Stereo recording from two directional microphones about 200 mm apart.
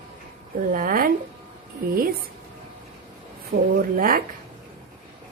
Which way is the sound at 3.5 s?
50° right (ahead or behind).